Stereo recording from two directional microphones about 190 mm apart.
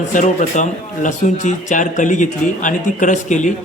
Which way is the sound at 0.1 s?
40° left (ahead or behind).